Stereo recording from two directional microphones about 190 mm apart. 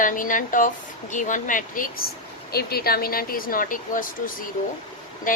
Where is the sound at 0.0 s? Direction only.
45° left (ahead or behind).